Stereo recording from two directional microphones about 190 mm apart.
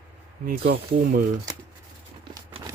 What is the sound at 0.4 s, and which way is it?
Speech, 55° right (ahead or behind).